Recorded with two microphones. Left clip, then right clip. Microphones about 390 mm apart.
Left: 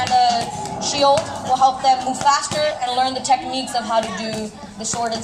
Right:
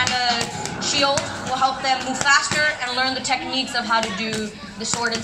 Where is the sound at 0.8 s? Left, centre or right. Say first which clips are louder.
Even; centre.